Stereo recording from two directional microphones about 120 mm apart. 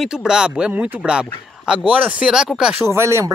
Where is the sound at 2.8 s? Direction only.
25° right (ahead or behind).